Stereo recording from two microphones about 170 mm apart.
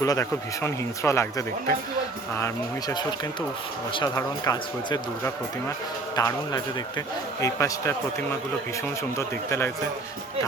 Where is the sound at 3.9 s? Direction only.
20° left (ahead or behind).